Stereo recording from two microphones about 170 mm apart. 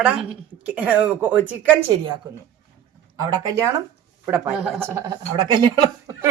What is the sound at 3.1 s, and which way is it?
Speech, 20° right (ahead or behind).